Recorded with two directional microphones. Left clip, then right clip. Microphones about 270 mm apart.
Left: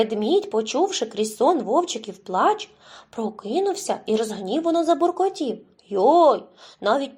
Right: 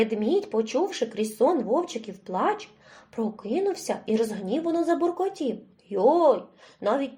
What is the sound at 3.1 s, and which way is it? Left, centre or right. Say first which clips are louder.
Speech: left 3 dB; left.